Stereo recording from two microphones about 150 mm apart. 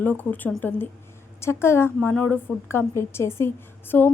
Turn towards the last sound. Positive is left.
turn(degrees=15)  # may be behind; listen again after turning